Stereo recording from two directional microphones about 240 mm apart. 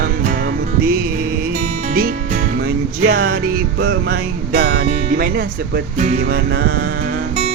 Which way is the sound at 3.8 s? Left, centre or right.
Right.